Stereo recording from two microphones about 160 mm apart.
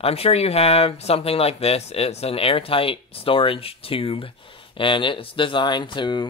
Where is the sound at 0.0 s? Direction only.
40° left (ahead or behind).